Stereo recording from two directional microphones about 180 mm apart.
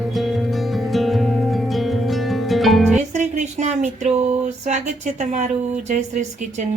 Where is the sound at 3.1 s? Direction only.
40° right (ahead or behind).